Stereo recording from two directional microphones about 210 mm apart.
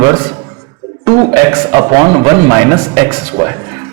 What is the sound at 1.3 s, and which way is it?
A man's voice, 15° right (ahead or behind).